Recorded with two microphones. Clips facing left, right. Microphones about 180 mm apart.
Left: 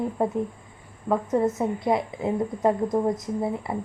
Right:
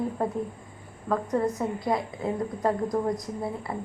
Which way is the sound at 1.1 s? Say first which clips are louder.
Left 3 dB; 20° left (ahead or behind).